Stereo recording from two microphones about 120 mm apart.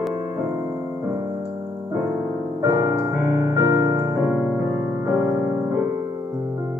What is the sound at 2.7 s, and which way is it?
Piano, 25° right (ahead or behind).